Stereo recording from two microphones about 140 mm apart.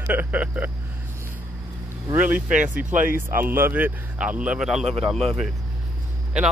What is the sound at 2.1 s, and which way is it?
Speech, 10° right (ahead or behind).